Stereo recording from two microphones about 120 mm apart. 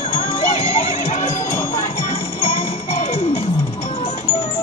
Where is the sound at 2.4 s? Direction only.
65° left (ahead or behind).